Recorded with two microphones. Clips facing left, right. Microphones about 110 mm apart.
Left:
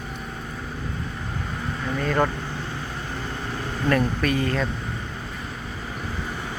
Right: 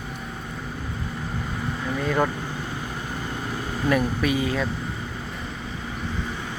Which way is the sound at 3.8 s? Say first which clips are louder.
Even; 10° right (ahead or behind).